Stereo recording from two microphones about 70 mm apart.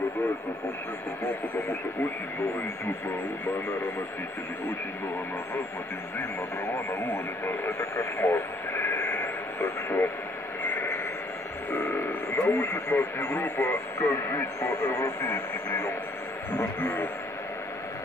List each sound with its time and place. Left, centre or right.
7.4 s radio: left
10.7 s a sound: left
11.7 s speech: left